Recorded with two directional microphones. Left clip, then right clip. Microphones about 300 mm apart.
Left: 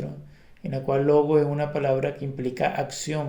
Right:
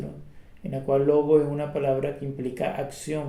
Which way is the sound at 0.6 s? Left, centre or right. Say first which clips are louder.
Right 1 dB; left.